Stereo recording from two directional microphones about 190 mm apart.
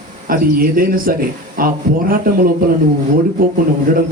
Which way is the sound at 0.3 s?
50° right (ahead or behind).